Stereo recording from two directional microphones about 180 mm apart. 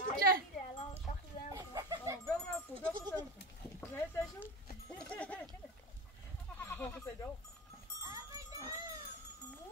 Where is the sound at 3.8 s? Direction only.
10° left (ahead or behind).